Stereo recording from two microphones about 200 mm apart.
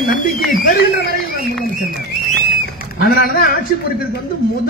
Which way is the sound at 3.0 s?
45° left (ahead or behind).